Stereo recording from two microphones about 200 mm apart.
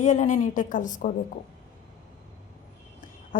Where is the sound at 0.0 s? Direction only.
35° left (ahead or behind).